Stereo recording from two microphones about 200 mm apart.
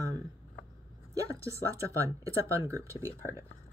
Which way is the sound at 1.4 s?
15° right (ahead or behind).